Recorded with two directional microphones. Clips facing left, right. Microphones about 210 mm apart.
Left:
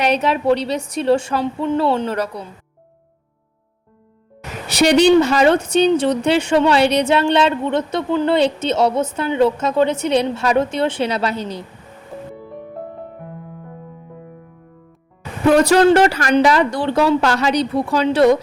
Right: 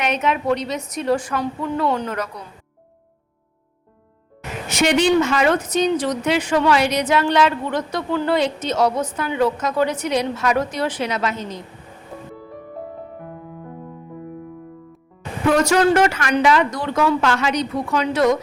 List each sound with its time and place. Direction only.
0.0 s speech: 35° left (ahead or behind)
4.7 s speech: 35° left (ahead or behind)
15.4 s speech: 35° left (ahead or behind)